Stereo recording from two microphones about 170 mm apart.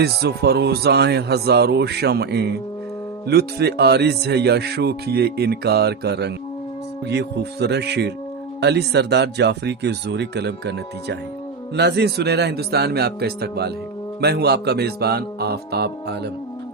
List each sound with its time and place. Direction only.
0.0 s speech: 70° right (ahead or behind)